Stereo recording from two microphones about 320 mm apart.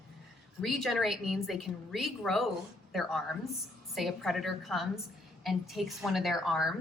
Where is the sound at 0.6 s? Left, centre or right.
Centre.